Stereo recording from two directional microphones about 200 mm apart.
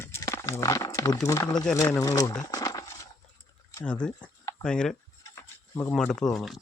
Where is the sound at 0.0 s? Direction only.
15° left (ahead or behind).